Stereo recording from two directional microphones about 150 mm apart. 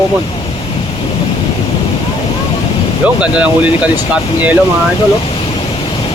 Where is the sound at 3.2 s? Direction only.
5° right (ahead or behind).